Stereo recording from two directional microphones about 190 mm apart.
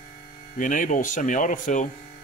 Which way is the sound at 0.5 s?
45° left (ahead or behind).